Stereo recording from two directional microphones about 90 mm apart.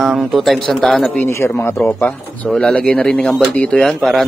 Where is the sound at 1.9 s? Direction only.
15° left (ahead or behind).